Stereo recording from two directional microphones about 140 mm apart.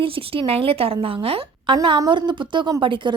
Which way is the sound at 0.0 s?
40° right (ahead or behind).